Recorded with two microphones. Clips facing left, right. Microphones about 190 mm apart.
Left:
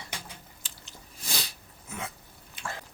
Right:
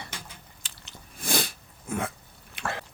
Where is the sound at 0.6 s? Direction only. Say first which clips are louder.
Right 1 dB; 60° right (ahead or behind).